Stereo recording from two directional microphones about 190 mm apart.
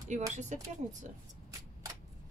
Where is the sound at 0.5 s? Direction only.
40° right (ahead or behind).